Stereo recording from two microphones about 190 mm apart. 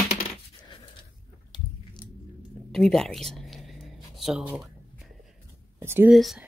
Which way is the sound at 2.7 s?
Centre (ahead or behind).